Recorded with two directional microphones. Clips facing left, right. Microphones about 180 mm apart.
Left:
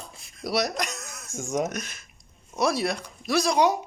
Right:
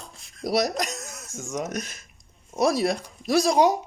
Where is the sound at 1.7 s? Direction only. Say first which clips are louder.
Right 2 dB; 35° right (ahead or behind).